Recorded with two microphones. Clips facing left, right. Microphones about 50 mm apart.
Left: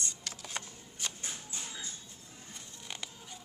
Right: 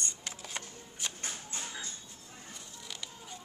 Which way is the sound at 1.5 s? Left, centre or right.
Right.